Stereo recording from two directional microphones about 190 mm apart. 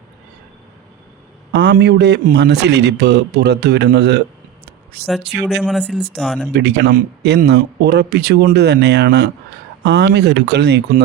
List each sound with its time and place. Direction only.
1.5 s a man's voice: 65° right (ahead or behind)
5.5 s speech: centre (ahead or behind)
6.5 s a man's voice: 65° right (ahead or behind)